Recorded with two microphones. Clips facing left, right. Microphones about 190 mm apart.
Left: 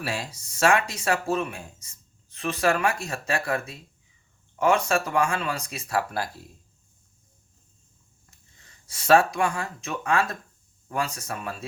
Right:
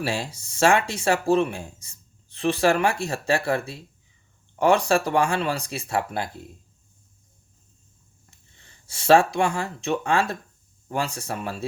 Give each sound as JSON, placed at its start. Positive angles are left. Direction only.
{"t": 0.0, "sound": "speech", "side_deg": -30}
{"t": 8.3, "sound": "speech", "side_deg": -30}